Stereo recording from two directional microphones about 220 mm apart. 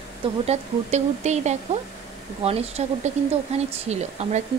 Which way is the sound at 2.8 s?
30° right (ahead or behind).